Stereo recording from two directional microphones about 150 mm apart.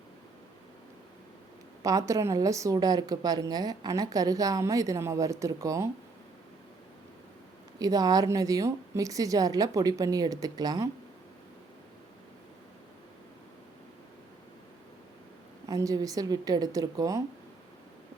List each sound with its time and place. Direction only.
1.8 s a woman's voice: 25° right (ahead or behind)
7.8 s a woman's voice: 25° right (ahead or behind)
15.6 s a woman's voice: 20° right (ahead or behind)